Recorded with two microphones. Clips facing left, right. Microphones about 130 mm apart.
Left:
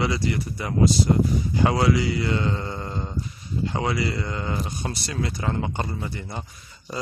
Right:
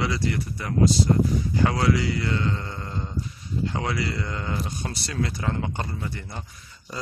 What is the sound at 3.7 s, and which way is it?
Speech, 10° left (ahead or behind).